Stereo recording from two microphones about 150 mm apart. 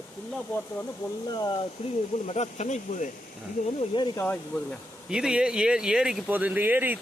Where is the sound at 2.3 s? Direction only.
50° left (ahead or behind).